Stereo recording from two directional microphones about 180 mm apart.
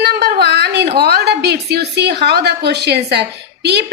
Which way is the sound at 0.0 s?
65° right (ahead or behind).